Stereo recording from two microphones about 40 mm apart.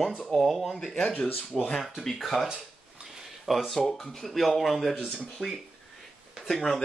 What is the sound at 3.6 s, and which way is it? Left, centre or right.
Speech, centre.